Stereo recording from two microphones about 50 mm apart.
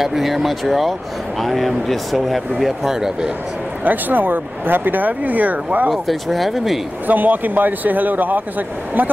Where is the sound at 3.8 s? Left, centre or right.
Right.